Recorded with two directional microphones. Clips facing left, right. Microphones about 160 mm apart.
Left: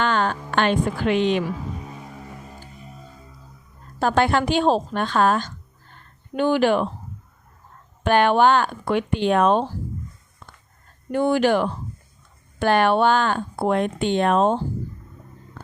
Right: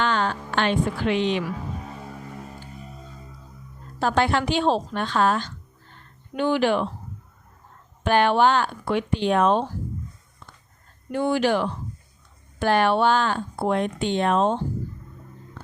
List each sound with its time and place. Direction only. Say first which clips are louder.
0.0 s a woman's voice: left 2 dB; 50° left (ahead or behind)
4.0 s speech: left 2 dB; 50° left (ahead or behind)
8.0 s speech: left 2 dB; 55° left (ahead or behind)
11.1 s speech: left 3 dB; 50° left (ahead or behind)